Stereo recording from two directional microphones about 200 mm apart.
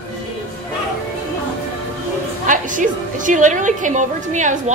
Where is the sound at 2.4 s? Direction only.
40° right (ahead or behind).